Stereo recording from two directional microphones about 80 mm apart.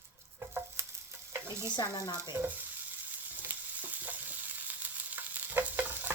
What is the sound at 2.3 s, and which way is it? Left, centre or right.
Frying, right.